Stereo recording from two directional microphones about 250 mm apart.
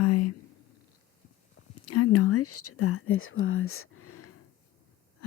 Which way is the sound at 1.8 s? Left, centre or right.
Left.